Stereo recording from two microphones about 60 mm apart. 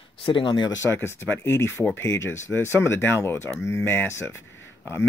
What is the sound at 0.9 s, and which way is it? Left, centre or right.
Speech, left.